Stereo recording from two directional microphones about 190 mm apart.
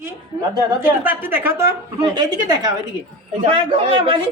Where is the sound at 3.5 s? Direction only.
30° right (ahead or behind).